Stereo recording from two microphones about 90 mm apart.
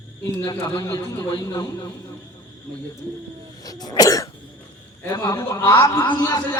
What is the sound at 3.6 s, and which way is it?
Speech, 45° left (ahead or behind).